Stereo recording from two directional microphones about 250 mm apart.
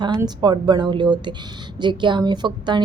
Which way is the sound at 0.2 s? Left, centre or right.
Centre.